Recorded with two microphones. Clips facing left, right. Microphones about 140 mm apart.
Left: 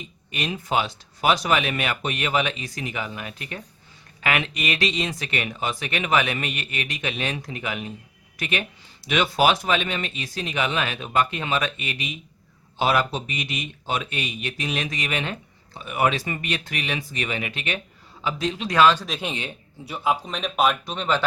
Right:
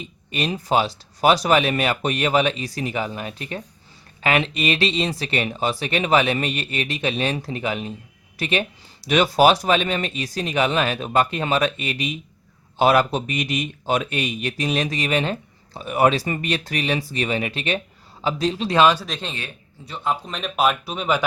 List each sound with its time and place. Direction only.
0.3 s speech: 35° right (ahead or behind)
18.8 s speech: 15° right (ahead or behind)
19.2 s a man's voice: 15° left (ahead or behind)
20.2 s speech: centre (ahead or behind)